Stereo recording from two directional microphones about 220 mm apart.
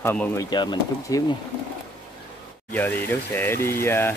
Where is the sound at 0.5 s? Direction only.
20° left (ahead or behind).